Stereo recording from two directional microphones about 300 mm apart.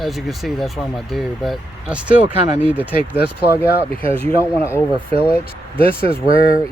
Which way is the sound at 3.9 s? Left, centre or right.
Centre.